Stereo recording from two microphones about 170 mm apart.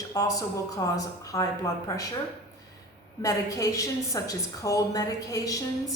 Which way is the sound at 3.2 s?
20° left (ahead or behind).